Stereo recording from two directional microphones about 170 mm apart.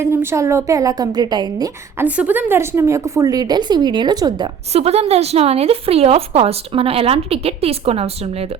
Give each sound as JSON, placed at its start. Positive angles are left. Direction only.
{"t": 0.0, "sound": "a woman's voice", "side_deg": -15}
{"t": 2.0, "sound": "a woman's voice", "side_deg": -10}
{"t": 4.7, "sound": "a woman's voice", "side_deg": -40}